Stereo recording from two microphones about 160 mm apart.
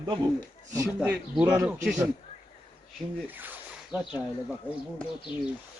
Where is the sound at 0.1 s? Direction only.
25° right (ahead or behind).